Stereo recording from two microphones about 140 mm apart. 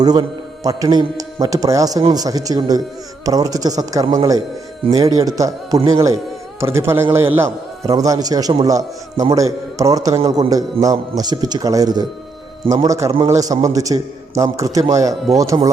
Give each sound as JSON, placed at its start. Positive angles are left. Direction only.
{"t": 0.0, "sound": "speech", "side_deg": -30}